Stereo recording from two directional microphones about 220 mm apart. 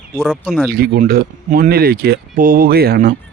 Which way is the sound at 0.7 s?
45° right (ahead or behind).